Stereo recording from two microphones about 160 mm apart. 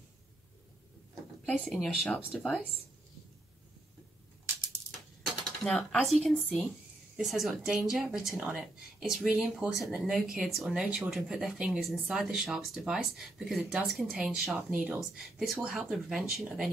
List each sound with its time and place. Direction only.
1.6 s speech: centre (ahead or behind)
5.6 s speech: centre (ahead or behind)